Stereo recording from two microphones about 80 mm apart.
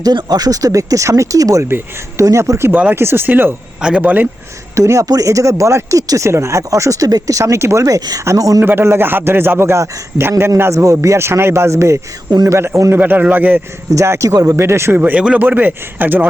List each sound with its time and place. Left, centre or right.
0.0 s speech: right
1.6 s speech: right
3.8 s speech: centre
4.0 s speech: right
4.7 s speech: right
8.6 s speech: right
12.9 s speech: right
13.9 s speech: right
14.5 s speech: right
15.2 s a man's voice: centre